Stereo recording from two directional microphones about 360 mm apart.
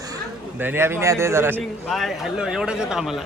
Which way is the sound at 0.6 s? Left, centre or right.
Centre.